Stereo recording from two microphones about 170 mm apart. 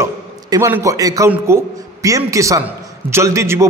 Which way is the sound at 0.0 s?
15° right (ahead or behind).